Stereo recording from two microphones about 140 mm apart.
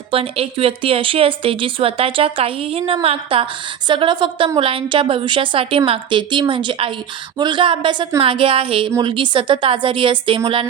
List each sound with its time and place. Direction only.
0.1 s a woman's voice: 40° right (ahead or behind)